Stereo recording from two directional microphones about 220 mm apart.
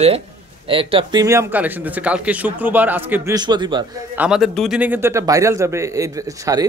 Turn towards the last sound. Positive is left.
turn(degrees=-15)  # may be behind; listen again after turning